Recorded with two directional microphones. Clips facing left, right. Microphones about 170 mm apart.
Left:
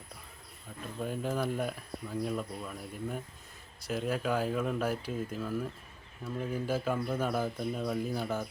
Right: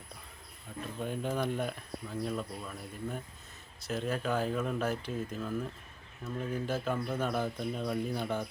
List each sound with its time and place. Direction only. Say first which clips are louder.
0.9 s speech: left 1 dB; 5° left (ahead or behind)